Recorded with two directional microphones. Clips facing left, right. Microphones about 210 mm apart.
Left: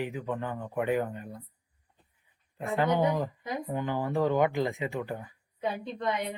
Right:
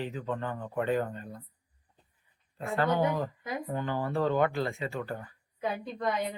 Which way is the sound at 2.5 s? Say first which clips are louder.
Left 1 dB; 15° left (ahead or behind).